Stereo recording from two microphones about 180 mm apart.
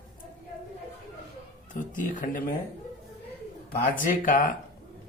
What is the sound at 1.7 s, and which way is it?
Speech, 45° left (ahead or behind).